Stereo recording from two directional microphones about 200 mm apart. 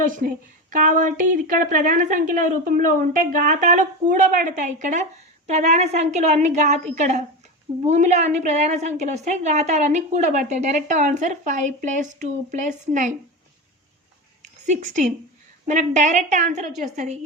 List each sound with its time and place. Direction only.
0.7 s a woman's voice: 40° right (ahead or behind)
14.4 s a sound: 35° right (ahead or behind)
15.6 s a woman's voice: 40° right (ahead or behind)